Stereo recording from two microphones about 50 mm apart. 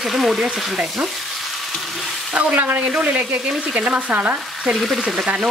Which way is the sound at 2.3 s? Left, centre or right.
Right.